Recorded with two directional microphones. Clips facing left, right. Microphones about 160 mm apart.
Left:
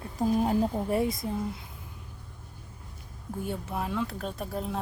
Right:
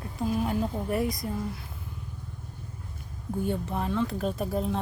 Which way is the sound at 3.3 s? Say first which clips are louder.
Right 4 dB; 5° left (ahead or behind).